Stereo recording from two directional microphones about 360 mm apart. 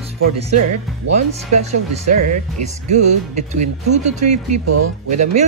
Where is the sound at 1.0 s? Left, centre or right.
Right.